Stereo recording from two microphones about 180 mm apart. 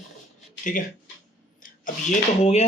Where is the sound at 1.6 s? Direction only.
45° left (ahead or behind).